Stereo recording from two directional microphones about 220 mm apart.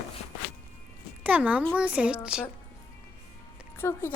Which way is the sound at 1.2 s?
5° right (ahead or behind).